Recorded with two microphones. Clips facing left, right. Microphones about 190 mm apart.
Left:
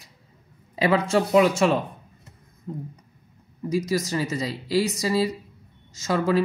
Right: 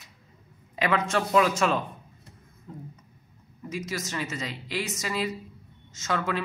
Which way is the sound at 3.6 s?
35° left (ahead or behind).